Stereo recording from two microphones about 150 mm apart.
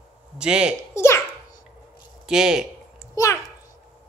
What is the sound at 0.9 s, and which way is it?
Speech, 15° left (ahead or behind).